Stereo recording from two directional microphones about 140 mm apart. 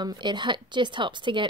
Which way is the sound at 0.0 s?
30° right (ahead or behind).